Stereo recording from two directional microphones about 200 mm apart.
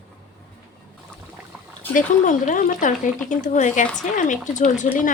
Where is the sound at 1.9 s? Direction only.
40° left (ahead or behind).